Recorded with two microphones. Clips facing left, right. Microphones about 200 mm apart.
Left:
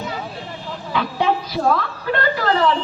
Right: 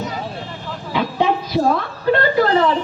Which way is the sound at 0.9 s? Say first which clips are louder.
Right 2 dB; 20° right (ahead or behind).